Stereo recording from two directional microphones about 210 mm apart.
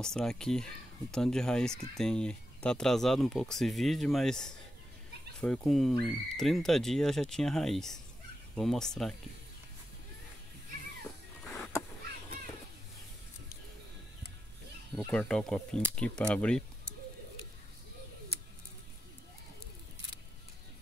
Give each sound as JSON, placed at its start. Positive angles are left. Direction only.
{"t": 0.0, "sound": "speech", "side_deg": 5}
{"t": 11.4, "sound": "a sound", "side_deg": 0}
{"t": 15.0, "sound": "speech", "side_deg": 5}